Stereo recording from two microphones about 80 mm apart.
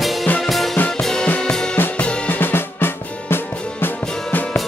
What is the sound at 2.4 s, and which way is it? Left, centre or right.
Music, left.